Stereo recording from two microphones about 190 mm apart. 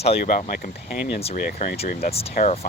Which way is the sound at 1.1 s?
30° left (ahead or behind).